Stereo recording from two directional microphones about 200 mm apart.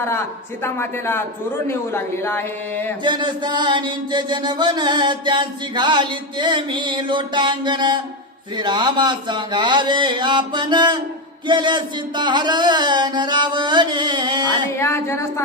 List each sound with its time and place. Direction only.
0.6 s speech: 10° left (ahead or behind)
3.0 s mantra: 20° right (ahead or behind)
14.8 s speech: 15° left (ahead or behind)